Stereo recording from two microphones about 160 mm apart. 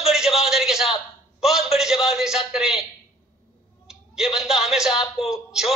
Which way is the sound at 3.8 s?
5° right (ahead or behind).